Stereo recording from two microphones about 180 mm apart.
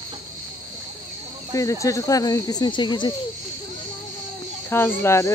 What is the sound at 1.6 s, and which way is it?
Speech, 15° left (ahead or behind).